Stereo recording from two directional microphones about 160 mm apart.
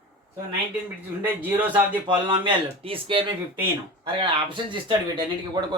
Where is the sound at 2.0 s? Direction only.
30° right (ahead or behind).